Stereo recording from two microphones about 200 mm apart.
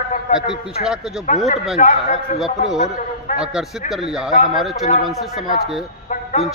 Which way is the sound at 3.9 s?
Centre (ahead or behind).